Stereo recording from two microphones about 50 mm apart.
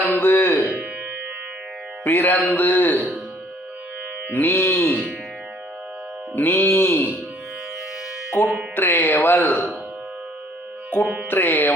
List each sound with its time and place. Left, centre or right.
0.2 s music: left
2.0 s speech: left
4.3 s music: left
6.3 s music: left
8.4 s music: left
11.0 s music: right
11.3 s music: left